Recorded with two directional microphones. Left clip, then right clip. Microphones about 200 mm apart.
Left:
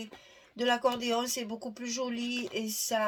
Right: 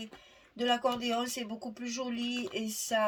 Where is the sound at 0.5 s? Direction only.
35° left (ahead or behind).